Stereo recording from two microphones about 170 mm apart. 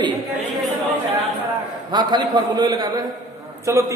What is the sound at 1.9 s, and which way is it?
A man's voice, 25° right (ahead or behind).